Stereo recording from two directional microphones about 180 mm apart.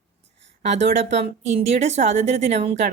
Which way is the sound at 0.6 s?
40° right (ahead or behind).